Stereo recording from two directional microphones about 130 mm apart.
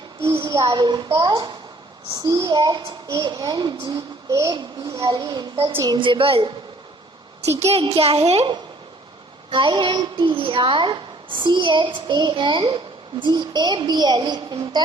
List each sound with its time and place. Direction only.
0.2 s a woman's voice: 20° right (ahead or behind); by 6.5 s 45° right (ahead or behind)
7.7 s a child's voice: 50° right (ahead or behind)
9.5 s a woman's voice: 35° right (ahead or behind)